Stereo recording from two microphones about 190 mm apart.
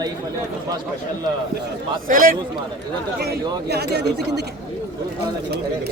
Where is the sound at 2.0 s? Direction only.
45° right (ahead or behind).